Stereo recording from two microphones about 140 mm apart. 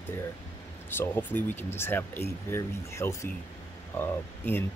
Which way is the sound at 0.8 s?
15° left (ahead or behind).